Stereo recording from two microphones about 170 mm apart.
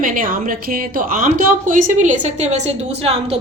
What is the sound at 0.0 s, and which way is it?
A woman's voice, 55° right (ahead or behind).